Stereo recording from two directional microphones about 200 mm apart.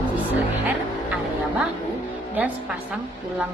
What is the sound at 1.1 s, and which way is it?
Music, 5° right (ahead or behind).